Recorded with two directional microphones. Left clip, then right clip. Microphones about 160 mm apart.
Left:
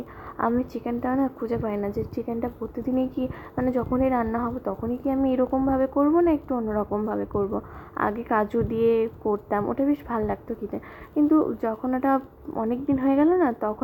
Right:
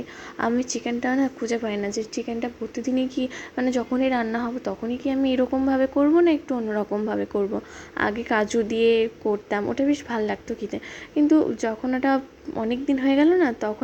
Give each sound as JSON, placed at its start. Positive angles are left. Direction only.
{"t": 0.3, "sound": "a woman's voice", "side_deg": -35}
{"t": 3.2, "sound": "speech", "side_deg": -35}